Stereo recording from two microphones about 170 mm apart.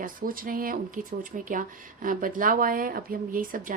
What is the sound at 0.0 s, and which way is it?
A woman's voice, 55° right (ahead or behind).